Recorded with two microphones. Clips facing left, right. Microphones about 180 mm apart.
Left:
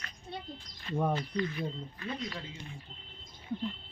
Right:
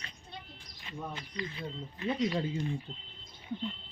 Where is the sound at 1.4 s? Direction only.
20° right (ahead or behind).